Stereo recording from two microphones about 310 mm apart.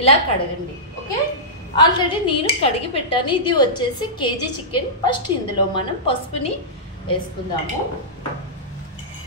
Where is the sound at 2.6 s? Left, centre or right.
Centre.